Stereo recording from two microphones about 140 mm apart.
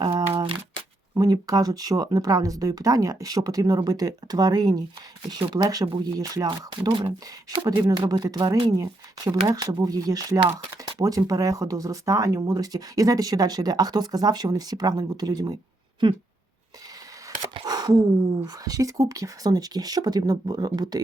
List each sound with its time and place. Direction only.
0.0 s shuffling cards: 25° right (ahead or behind)
1.1 s speech: 25° right (ahead or behind)
17.7 s a sound: 30° right (ahead or behind)
18.3 s speech: 25° right (ahead or behind)